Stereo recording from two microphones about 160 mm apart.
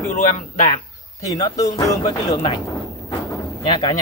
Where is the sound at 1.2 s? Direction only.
20° left (ahead or behind).